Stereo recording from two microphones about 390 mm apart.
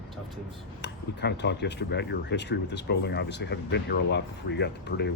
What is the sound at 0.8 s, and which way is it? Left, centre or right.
Speech, left.